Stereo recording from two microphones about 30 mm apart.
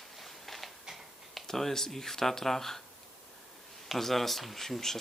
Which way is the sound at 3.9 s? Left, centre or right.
Centre.